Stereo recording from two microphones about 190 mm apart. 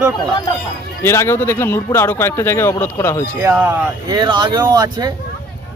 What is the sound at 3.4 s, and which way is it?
Speech, 10° right (ahead or behind).